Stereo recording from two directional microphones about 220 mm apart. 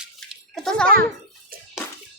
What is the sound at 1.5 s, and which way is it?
Bathtub, 40° right (ahead or behind).